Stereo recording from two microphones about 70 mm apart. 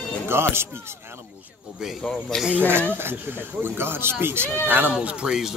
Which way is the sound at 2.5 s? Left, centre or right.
Right.